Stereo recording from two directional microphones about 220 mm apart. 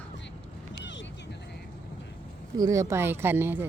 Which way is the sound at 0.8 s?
55° left (ahead or behind).